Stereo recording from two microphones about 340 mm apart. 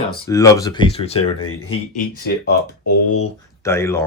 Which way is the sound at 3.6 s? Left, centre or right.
Centre.